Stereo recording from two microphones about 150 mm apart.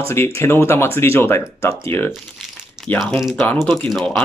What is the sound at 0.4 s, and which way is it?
Speech, 15° left (ahead or behind).